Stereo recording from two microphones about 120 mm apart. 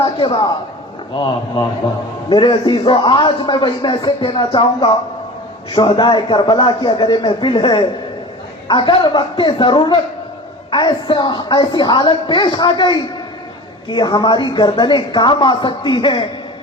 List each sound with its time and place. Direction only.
0.0 s a man's voice: 45° left (ahead or behind)